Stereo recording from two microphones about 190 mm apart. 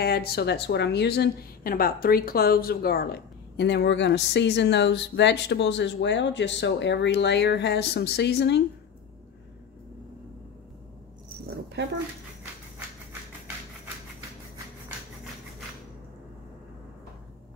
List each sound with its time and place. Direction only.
0.0 s speech: 55° left (ahead or behind)